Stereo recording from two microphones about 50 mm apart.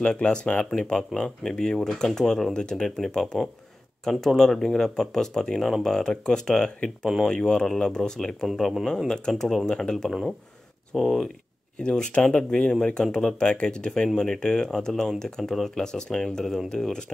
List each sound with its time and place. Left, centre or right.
0.2 s speech: centre
11.8 s speech: centre